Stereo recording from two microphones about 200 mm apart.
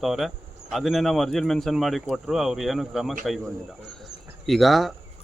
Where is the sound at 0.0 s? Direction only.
Centre (ahead or behind).